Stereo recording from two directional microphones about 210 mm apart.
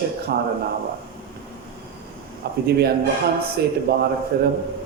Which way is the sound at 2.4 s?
50° right (ahead or behind).